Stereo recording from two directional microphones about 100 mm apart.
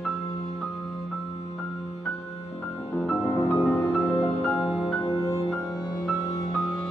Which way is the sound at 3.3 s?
25° left (ahead or behind).